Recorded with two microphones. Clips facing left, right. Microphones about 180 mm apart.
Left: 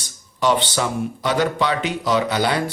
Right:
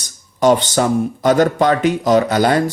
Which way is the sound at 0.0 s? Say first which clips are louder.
Right 6 dB; 45° right (ahead or behind).